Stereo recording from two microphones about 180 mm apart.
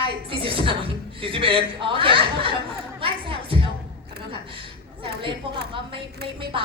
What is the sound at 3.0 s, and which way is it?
Music, 30° right (ahead or behind).